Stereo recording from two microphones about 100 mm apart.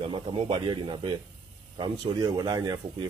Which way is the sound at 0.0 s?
55° right (ahead or behind).